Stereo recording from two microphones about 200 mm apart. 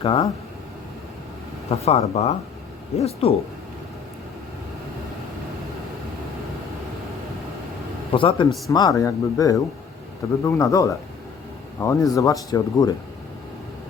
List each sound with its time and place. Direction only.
0.0 s a man's voice: 25° left (ahead or behind)
1.8 s speech: 30° left (ahead or behind)
8.1 s a man's voice: 25° left (ahead or behind)